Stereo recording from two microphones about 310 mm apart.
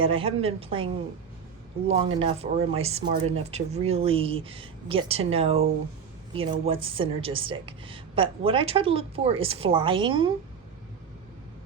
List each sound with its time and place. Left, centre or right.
0.0 s a woman's voice: centre
1.9 s a woman's voice: centre